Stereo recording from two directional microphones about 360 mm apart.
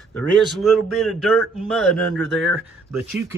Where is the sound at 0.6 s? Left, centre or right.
Centre.